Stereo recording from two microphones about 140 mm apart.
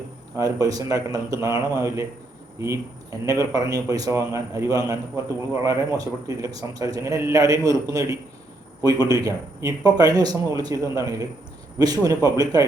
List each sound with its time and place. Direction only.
0.3 s a man's voice: 25° right (ahead or behind)
6.2 s a man's voice: 25° right (ahead or behind)